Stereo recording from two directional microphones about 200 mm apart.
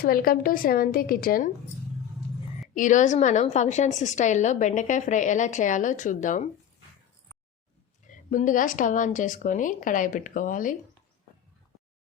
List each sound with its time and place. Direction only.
0.0 s a woman's voice: 45° left (ahead or behind)
2.7 s a woman's voice: 40° left (ahead or behind)
8.3 s a woman's voice: 40° left (ahead or behind)